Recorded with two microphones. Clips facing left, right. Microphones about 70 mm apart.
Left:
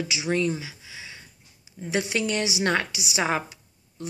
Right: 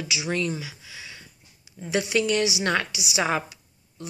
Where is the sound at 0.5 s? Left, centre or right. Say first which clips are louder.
Even; left.